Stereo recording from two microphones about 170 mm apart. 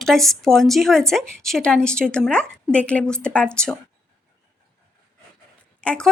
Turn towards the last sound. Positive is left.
turn(degrees=5)  # may be behind; listen again after turning